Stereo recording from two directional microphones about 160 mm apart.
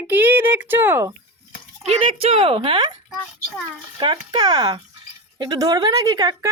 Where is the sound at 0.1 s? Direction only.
10° right (ahead or behind).